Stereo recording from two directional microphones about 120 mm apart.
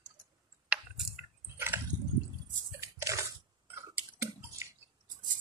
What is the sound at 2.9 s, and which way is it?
Squish, 25° right (ahead or behind).